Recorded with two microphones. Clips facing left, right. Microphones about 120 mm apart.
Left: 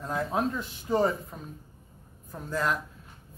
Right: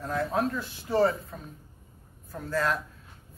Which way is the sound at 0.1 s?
20° left (ahead or behind).